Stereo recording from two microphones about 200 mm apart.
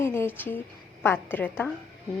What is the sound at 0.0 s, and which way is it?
A woman's voice, 10° left (ahead or behind).